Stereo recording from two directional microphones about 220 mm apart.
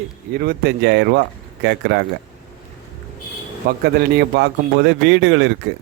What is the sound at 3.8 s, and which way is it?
Speech, 50° right (ahead or behind).